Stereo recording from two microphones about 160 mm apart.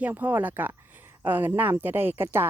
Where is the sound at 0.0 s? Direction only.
10° right (ahead or behind).